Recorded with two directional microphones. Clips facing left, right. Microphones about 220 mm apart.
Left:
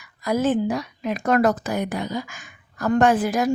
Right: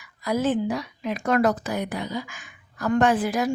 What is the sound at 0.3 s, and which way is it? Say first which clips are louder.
Speech: left 2 dB; 45° left (ahead or behind).